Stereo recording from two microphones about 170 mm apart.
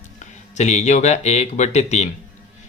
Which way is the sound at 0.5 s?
40° left (ahead or behind).